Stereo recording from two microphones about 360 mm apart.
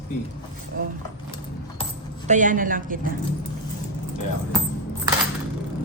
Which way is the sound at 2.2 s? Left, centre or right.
Right.